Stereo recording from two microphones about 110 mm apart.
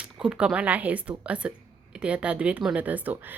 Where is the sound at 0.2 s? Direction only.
10° right (ahead or behind).